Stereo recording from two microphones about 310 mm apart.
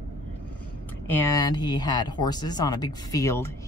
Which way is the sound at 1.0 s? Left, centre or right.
Centre.